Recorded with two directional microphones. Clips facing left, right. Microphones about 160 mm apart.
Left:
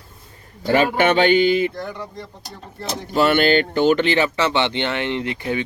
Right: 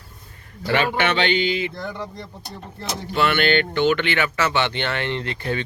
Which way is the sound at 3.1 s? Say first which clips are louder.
Left 4 dB; 40° left (ahead or behind).